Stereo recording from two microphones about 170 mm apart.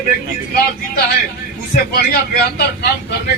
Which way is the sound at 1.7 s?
65° left (ahead or behind).